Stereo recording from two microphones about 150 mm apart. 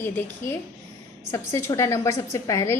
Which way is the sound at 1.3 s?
20° left (ahead or behind).